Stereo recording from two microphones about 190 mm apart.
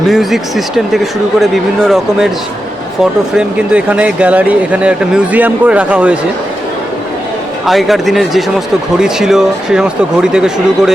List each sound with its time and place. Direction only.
0.1 s speech: centre (ahead or behind)
7.6 s speech: centre (ahead or behind)